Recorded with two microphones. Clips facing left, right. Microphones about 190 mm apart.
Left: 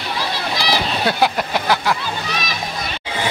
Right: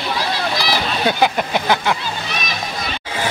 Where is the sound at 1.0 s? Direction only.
Centre (ahead or behind).